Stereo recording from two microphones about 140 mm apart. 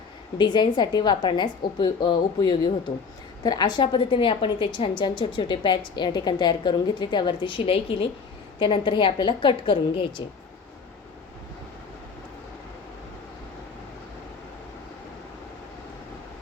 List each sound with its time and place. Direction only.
0.3 s a woman's voice: 35° left (ahead or behind)